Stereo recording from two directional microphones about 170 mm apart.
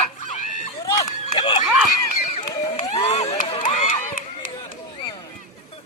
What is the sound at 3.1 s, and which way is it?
Speech, 40° left (ahead or behind).